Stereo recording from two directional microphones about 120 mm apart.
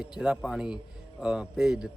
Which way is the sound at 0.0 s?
5° right (ahead or behind).